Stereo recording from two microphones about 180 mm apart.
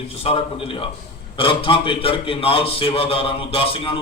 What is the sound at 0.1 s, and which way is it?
A man's voice, 35° left (ahead or behind).